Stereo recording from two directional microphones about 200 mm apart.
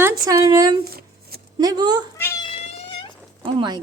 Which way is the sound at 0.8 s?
50° right (ahead or behind).